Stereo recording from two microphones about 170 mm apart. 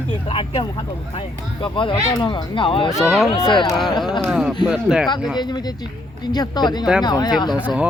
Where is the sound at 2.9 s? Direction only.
Centre (ahead or behind).